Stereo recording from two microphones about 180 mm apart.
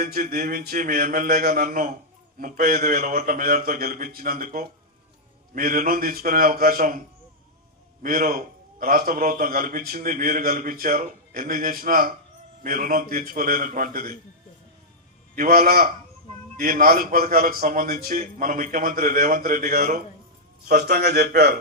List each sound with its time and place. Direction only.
0.0 s a man's voice: 55° right (ahead or behind)
8.0 s a man's voice: 50° right (ahead or behind)
15.4 s a man's voice: 50° right (ahead or behind)
20.9 s a man's voice: 65° right (ahead or behind)